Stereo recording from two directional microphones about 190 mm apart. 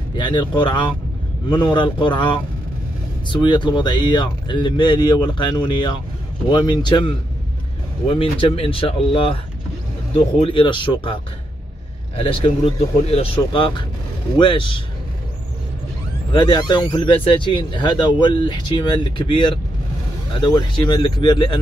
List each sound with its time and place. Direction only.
0.2 s speech: 25° left (ahead or behind)
12.2 s speech: 30° left (ahead or behind)
16.3 s speech: 25° left (ahead or behind)